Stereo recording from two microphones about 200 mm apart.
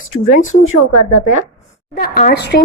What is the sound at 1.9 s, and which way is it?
Speech, 45° left (ahead or behind).